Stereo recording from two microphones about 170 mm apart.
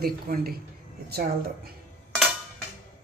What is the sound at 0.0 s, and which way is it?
Speech, 65° right (ahead or behind).